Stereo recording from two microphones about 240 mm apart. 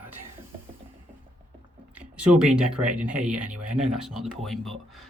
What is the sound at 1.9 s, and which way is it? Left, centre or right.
Speech, centre.